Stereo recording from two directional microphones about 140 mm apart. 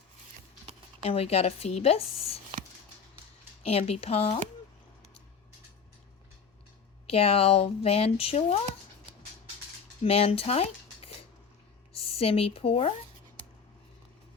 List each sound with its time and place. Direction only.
1.0 s speech: 45° left (ahead or behind)
3.6 s speech: 45° left (ahead or behind)
7.1 s speech: 45° left (ahead or behind)
10.0 s speech: 45° left (ahead or behind)